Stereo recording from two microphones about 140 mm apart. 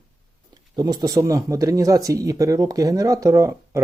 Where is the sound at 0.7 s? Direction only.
30° right (ahead or behind).